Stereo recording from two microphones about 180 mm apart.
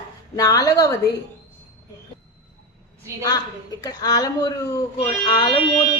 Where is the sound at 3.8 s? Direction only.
20° left (ahead or behind).